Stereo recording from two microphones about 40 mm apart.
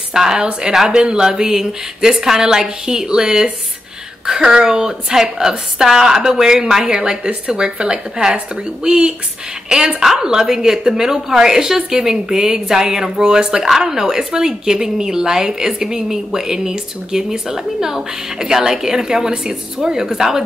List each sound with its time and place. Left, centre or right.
0.1 s a woman's voice: centre
7.2 s speech: right
7.6 s a woman's voice: centre